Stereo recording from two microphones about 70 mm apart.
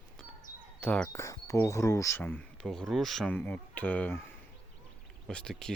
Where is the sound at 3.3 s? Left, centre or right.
Left.